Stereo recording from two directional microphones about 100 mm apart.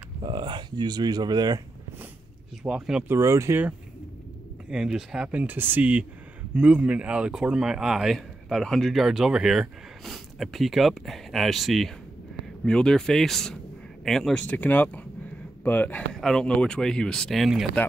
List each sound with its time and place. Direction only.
0.2 s speech: 50° right (ahead or behind)
2.6 s speech: 5° right (ahead or behind)
3.1 s speech: 30° right (ahead or behind)
4.6 s speech: 5° right (ahead or behind); by 16.0 s 20° left (ahead or behind)
16.1 s speech: 5° left (ahead or behind)